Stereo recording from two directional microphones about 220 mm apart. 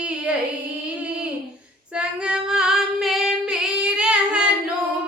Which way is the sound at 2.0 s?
5° right (ahead or behind).